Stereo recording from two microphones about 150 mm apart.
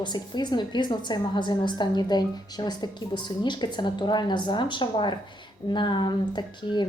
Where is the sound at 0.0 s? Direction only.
30° left (ahead or behind).